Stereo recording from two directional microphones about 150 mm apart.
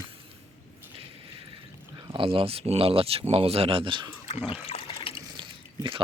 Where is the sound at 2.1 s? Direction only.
35° right (ahead or behind).